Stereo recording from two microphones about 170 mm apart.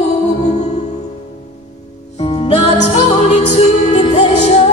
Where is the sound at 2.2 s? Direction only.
30° left (ahead or behind).